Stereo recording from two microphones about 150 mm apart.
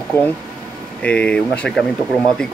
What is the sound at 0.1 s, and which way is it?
Speech, 10° left (ahead or behind).